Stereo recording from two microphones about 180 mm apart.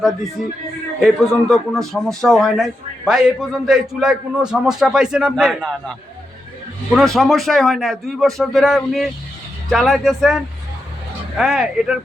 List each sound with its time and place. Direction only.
0.9 s a man's voice: centre (ahead or behind)
6.9 s a man's voice: centre (ahead or behind)